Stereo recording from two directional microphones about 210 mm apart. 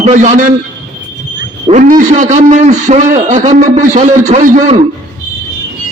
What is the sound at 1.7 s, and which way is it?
A man's voice, 40° right (ahead or behind).